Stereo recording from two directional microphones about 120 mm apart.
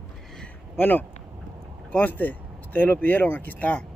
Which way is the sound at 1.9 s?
15° left (ahead or behind).